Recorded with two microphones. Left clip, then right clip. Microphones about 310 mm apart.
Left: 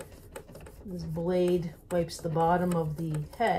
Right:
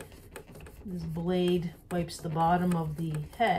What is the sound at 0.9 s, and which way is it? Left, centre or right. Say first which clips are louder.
Speech: left 3 dB; right.